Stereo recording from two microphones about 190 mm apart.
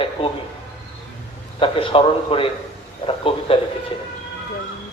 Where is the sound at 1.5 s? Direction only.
30° left (ahead or behind).